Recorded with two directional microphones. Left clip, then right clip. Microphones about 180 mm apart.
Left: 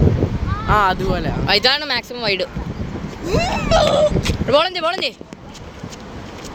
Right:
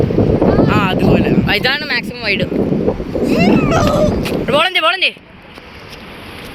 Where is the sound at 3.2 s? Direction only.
65° left (ahead or behind).